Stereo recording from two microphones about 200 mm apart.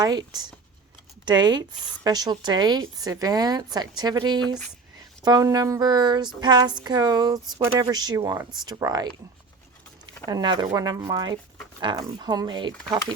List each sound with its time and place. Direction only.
0.0 s speech: 20° right (ahead or behind)
10.2 s speech: 20° right (ahead or behind)